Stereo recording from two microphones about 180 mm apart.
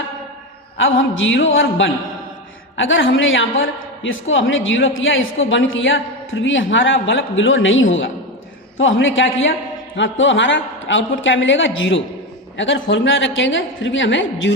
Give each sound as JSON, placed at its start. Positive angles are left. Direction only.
{"t": 0.8, "sound": "a man's voice", "side_deg": 90}